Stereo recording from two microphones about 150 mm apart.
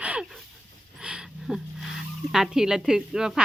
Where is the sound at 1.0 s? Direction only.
5° right (ahead or behind).